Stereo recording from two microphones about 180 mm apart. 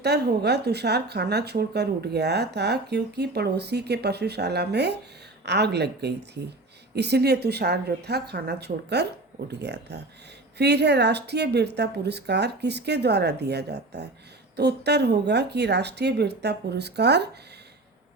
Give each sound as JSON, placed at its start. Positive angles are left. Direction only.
{"t": 0.0, "sound": "a woman's voice", "side_deg": -65}